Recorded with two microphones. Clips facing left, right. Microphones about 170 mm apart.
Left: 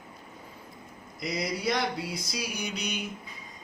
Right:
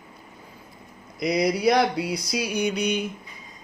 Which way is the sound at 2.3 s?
65° right (ahead or behind).